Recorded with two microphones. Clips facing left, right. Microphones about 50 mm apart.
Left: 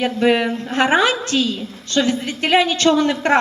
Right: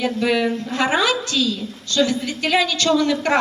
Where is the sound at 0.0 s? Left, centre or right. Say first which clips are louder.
Left 3 dB; left.